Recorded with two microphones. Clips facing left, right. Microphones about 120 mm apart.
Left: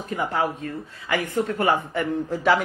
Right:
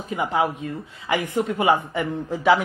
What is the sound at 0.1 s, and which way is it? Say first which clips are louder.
Speech: right 2 dB; 15° right (ahead or behind).